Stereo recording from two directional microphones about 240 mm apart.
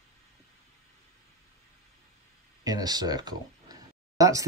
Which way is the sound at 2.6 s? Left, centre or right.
Centre.